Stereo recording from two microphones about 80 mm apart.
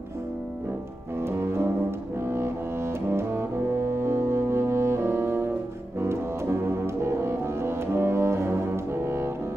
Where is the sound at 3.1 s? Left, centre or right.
Right.